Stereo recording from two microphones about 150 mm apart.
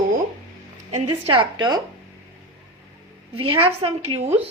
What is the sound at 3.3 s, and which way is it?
A woman's voice, 35° right (ahead or behind).